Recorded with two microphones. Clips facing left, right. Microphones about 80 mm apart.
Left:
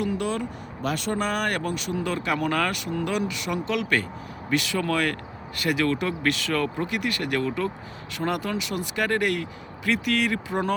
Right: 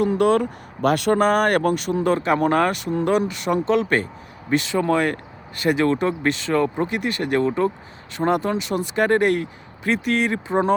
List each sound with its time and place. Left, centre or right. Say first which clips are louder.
0.0 s speech: right 8 dB; right
0.3 s speech: right 10 dB; right